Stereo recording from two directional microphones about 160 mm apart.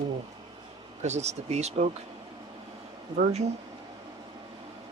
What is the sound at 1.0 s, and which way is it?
Speech, 45° right (ahead or behind).